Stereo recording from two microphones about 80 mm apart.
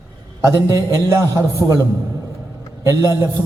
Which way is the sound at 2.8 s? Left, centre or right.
Right.